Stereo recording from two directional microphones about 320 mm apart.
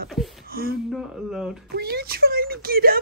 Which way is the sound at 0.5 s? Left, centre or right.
Right.